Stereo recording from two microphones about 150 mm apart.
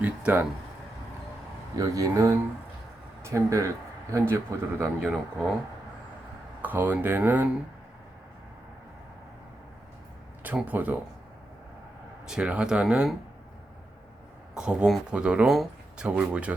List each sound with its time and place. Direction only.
0.0 s a sound: 10° right (ahead or behind)
1.7 s speech: 25° right (ahead or behind)
4.9 s speech: centre (ahead or behind)
6.6 s speech: 10° right (ahead or behind)
10.4 s speech: 10° right (ahead or behind)
12.2 s speech: 5° right (ahead or behind)
14.5 s speech: 5° right (ahead or behind)